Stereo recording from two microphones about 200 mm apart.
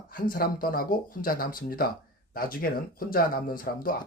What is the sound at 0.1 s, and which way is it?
Speech, 45° left (ahead or behind).